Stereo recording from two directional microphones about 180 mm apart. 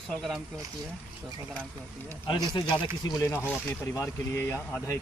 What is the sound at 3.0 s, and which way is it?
Speech, 20° left (ahead or behind).